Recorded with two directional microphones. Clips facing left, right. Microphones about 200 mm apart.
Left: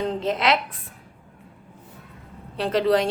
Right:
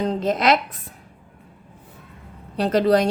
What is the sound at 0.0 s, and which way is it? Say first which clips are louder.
Speech: right 3 dB; 40° right (ahead or behind).